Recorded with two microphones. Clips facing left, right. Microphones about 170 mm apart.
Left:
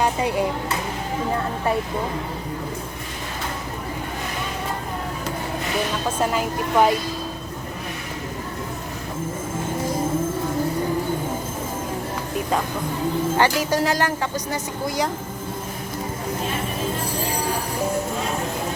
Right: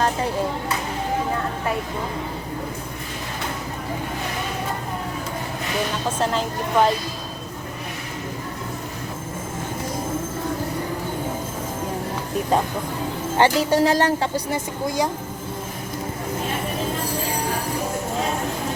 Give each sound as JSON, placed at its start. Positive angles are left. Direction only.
{"t": 0.0, "sound": "speech", "side_deg": 10}
{"t": 6.1, "sound": "a woman's voice", "side_deg": 10}
{"t": 13.4, "sound": "speech", "side_deg": -25}